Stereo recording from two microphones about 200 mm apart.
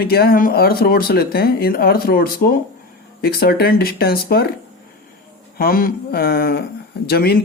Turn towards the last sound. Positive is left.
turn(degrees=50)  # may be behind; listen again after turning